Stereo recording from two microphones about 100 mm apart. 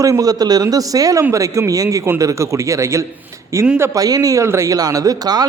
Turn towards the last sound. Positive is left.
turn(degrees=-40)  # may be behind; listen again after turning